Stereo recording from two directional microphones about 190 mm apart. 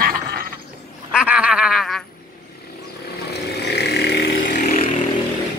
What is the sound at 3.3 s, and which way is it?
Vehicle, 60° left (ahead or behind).